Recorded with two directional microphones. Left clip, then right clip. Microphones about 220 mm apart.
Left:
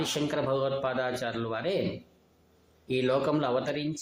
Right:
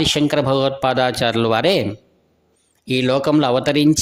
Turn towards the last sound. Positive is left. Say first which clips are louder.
# right 13 dB
turn(degrees=-45)  # may be behind; listen again after turning